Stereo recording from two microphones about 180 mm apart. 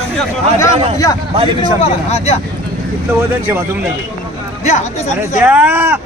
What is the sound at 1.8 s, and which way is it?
Speech, 35° left (ahead or behind).